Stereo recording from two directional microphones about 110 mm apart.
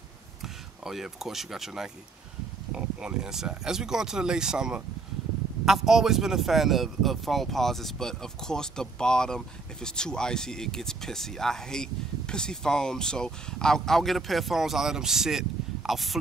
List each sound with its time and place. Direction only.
0.4 s speech: 5° right (ahead or behind)